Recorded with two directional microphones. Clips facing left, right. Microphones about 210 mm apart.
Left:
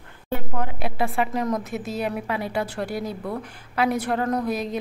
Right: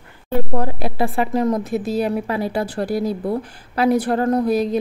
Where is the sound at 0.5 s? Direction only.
35° right (ahead or behind).